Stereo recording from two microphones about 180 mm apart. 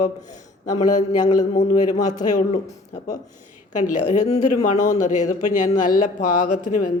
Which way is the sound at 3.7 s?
45° left (ahead or behind).